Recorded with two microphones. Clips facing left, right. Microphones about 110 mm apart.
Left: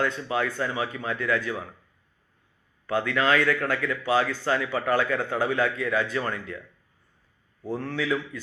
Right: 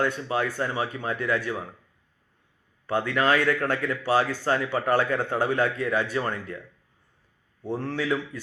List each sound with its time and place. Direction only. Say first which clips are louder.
0.2 s speech: even; 30° right (ahead or behind)
2.8 s speech: right 1 dB; 25° right (ahead or behind)
7.7 s speech: right 1 dB; 30° right (ahead or behind)